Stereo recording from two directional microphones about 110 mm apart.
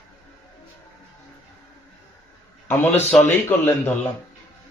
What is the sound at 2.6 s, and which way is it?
A man's voice, 20° left (ahead or behind).